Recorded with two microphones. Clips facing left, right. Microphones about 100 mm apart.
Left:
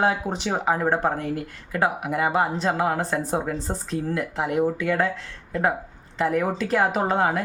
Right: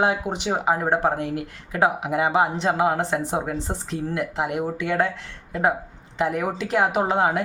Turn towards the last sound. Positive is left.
turn(degrees=-15)  # may be behind; listen again after turning